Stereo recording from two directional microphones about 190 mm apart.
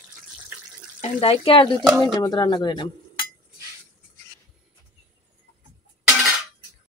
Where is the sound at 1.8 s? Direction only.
5° right (ahead or behind).